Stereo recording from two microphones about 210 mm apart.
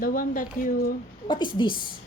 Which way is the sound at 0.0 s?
40° left (ahead or behind).